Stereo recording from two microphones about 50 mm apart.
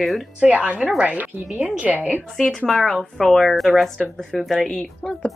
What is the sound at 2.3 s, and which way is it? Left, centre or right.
A woman's voice, centre.